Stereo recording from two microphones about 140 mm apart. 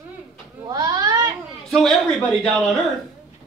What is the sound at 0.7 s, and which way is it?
Speech, 30° right (ahead or behind).